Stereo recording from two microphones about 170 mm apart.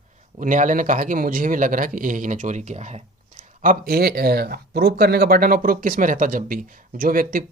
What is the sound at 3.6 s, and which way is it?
Speech, 65° right (ahead or behind).